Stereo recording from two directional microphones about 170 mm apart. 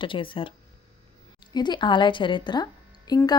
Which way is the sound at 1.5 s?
25° left (ahead or behind).